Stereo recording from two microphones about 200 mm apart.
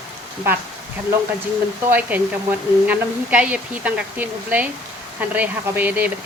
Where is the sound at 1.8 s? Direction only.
10° right (ahead or behind).